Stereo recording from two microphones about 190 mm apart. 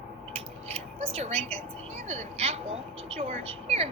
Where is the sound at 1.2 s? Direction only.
30° right (ahead or behind).